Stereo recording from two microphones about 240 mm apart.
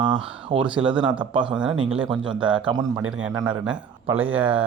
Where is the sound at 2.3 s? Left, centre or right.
Right.